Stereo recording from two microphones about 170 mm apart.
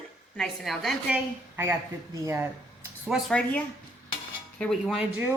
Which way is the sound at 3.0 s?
Centre (ahead or behind).